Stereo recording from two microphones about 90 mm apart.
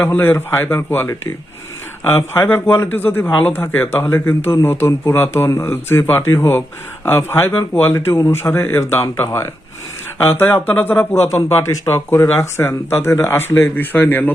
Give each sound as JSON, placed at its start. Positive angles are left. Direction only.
{"t": 0.0, "sound": "speech", "side_deg": 25}